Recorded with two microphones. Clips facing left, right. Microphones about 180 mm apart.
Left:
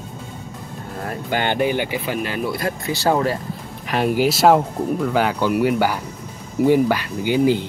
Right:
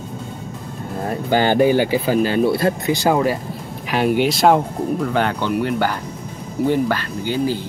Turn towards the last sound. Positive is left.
turn(degrees=15)  # may be behind; listen again after turning